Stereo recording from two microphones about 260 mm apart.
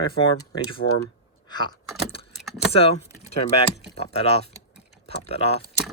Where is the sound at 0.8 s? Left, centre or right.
Left.